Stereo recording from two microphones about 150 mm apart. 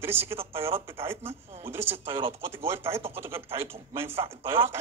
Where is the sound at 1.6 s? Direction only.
15° right (ahead or behind).